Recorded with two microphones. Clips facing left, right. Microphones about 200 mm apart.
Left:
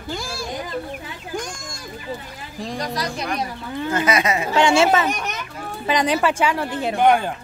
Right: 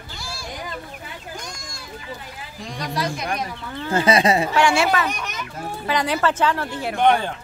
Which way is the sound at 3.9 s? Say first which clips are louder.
Right 3 dB; 30° right (ahead or behind).